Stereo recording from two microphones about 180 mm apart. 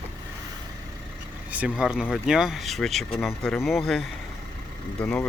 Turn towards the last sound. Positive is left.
turn(degrees=5)  # may be behind; listen again after turning